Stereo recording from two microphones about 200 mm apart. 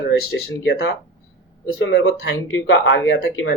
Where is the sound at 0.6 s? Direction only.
60° left (ahead or behind).